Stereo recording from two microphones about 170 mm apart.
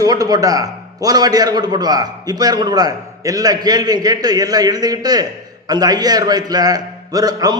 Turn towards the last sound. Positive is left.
turn(degrees=-20)  # may be behind; listen again after turning